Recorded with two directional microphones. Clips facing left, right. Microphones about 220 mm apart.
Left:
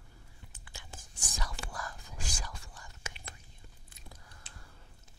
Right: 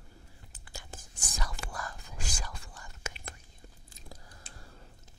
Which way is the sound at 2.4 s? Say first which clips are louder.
Right 2 dB; 55° right (ahead or behind).